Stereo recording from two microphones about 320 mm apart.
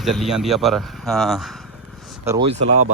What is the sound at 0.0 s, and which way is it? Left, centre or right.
Speech, centre.